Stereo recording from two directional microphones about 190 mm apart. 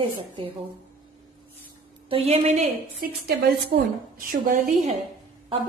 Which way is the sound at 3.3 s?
50° right (ahead or behind).